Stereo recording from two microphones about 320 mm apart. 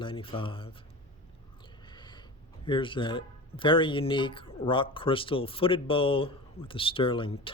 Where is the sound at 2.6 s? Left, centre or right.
Centre.